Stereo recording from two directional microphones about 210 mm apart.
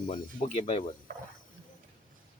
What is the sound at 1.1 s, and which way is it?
Speech, 45° right (ahead or behind).